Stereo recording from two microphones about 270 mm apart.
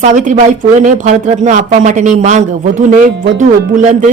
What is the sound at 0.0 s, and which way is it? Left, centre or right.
Speech, right.